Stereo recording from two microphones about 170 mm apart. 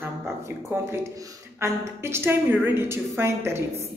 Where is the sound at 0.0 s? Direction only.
15° right (ahead or behind).